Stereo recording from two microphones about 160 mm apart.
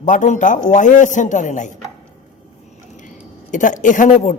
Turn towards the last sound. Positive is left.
turn(degrees=50)  # may be behind; listen again after turning